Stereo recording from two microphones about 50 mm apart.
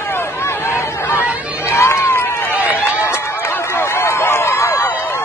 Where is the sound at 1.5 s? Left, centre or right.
Left.